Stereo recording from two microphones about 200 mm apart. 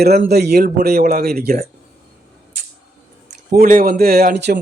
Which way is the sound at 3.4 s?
45° right (ahead or behind).